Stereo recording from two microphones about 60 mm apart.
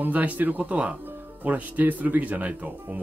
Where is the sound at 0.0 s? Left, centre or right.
Right.